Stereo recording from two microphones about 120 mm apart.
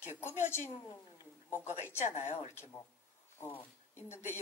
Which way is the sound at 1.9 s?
75° left (ahead or behind).